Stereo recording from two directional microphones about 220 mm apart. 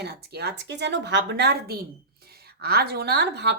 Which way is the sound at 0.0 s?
50° right (ahead or behind).